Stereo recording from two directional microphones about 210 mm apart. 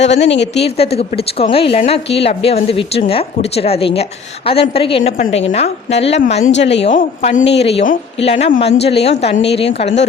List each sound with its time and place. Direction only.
0.0 s a woman's voice: 30° left (ahead or behind)